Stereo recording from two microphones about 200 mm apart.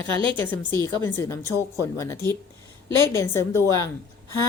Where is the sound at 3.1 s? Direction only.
15° left (ahead or behind).